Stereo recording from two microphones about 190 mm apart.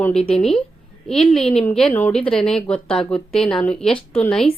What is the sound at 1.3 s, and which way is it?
Speech, 30° left (ahead or behind).